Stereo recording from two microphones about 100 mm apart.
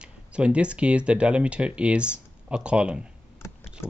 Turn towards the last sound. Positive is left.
turn(degrees=30)  # may be behind; listen again after turning